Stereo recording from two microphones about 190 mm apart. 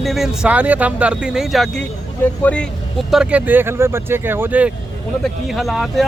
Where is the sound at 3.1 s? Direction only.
5° right (ahead or behind).